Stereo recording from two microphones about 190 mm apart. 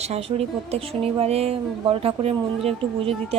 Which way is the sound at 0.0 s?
35° right (ahead or behind).